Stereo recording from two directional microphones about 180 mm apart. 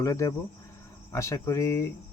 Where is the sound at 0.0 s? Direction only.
20° left (ahead or behind).